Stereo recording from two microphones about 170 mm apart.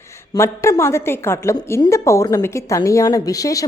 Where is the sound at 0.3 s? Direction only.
15° left (ahead or behind).